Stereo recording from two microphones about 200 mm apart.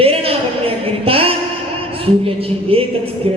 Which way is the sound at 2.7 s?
25° right (ahead or behind).